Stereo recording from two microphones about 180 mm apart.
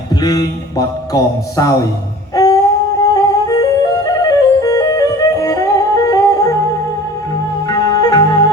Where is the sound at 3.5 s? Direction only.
20° left (ahead or behind).